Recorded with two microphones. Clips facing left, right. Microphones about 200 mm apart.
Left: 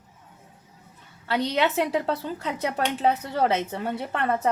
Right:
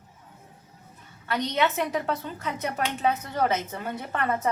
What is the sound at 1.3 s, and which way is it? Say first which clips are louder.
A woman's voice: left 2 dB; 30° left (ahead or behind).